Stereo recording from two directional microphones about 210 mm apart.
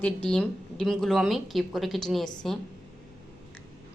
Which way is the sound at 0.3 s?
5° left (ahead or behind).